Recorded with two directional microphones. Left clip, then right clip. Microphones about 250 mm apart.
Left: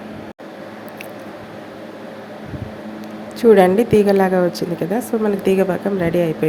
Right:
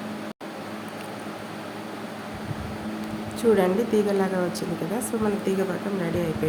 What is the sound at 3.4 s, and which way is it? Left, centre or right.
A woman's voice, left.